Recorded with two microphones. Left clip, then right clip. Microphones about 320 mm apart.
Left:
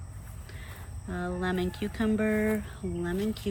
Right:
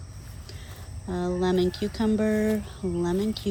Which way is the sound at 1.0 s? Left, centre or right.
Right.